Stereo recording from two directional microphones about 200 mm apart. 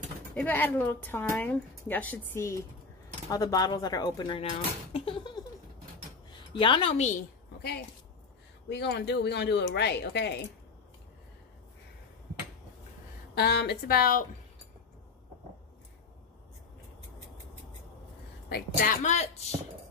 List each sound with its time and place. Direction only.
0.3 s a woman's voice: 10° left (ahead or behind); by 4.5 s 25° left (ahead or behind)
4.9 s a sound: 25° left (ahead or behind)
6.3 s a woman's voice: 25° left (ahead or behind)
8.6 s speech: 60° left (ahead or behind)
13.3 s a woman's voice: 55° left (ahead or behind)
18.5 s speech: 40° left (ahead or behind)